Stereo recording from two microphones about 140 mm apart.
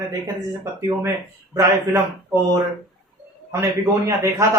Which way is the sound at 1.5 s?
20° right (ahead or behind).